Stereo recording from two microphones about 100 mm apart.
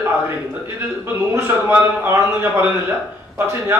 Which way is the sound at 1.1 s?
25° right (ahead or behind).